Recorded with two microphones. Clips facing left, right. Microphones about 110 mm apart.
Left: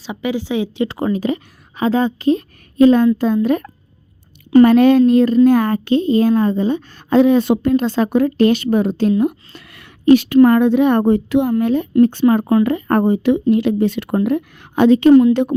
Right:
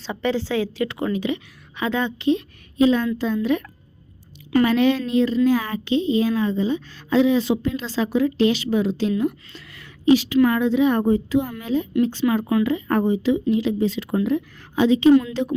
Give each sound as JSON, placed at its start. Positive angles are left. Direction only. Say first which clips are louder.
{"t": 0.0, "sound": "a woman's voice", "louder": "left 2 dB", "side_deg": 10}
{"t": 0.9, "sound": "a woman's voice", "louder": "left 5 dB", "side_deg": 35}
{"t": 12.2, "sound": "a woman's voice", "louder": "left 6 dB", "side_deg": 40}
{"t": 12.6, "sound": "a woman's voice", "louder": "left 5 dB", "side_deg": 55}